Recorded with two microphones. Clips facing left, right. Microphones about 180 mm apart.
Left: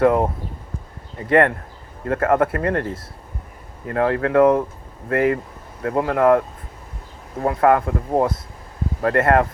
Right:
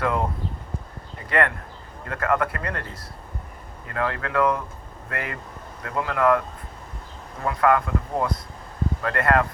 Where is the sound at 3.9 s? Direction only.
35° left (ahead or behind).